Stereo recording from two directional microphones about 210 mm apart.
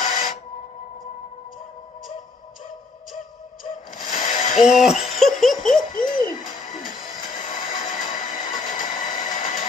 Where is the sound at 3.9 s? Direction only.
40° left (ahead or behind).